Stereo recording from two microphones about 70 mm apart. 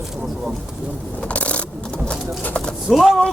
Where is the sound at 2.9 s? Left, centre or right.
Centre.